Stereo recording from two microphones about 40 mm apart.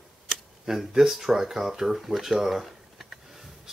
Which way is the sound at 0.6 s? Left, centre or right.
Centre.